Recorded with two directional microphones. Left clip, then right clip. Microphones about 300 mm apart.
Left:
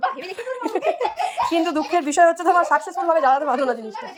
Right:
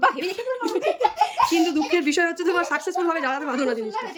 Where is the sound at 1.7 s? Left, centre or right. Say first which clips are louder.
Left 3 dB; centre.